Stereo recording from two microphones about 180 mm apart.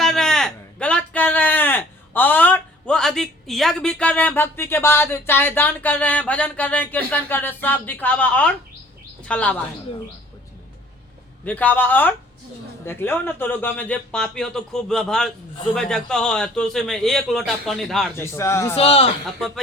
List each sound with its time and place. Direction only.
0.0 s a man's voice: 5° left (ahead or behind)
11.4 s a man's voice: 10° left (ahead or behind)
18.2 s a man's voice: 15° left (ahead or behind)
18.8 s a man's voice: 30° left (ahead or behind)